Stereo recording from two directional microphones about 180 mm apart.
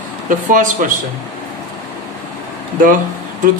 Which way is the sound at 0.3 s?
45° right (ahead or behind).